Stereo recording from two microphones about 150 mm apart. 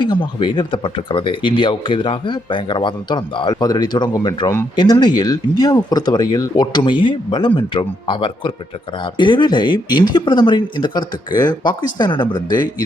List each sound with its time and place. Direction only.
0.0 s speech: 30° left (ahead or behind)